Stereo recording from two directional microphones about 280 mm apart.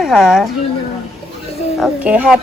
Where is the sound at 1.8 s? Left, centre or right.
Centre.